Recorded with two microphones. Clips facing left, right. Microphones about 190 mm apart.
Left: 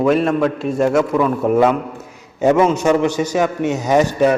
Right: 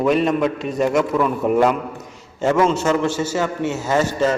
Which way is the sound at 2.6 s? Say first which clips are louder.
Left 3 dB; 15° left (ahead or behind).